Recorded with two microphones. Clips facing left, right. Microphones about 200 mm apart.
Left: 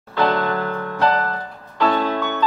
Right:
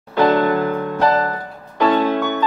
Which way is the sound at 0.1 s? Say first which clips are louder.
Right 5 dB; 15° right (ahead or behind).